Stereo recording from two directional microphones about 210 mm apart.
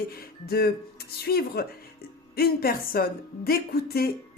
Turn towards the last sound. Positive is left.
turn(degrees=45)  # may be behind; listen again after turning